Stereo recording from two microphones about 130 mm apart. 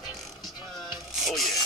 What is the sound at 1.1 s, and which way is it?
Music, centre (ahead or behind).